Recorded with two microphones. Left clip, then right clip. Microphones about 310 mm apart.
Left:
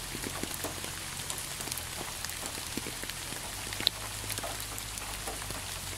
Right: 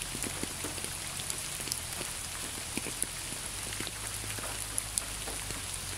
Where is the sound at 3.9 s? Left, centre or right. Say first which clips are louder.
Left 11 dB; left.